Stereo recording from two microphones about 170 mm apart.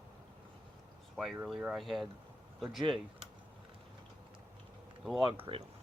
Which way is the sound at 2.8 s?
30° right (ahead or behind).